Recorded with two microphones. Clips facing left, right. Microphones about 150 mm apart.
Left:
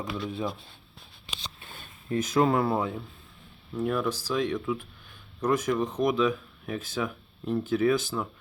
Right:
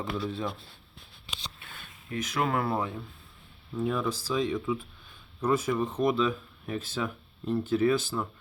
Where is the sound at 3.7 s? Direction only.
Centre (ahead or behind).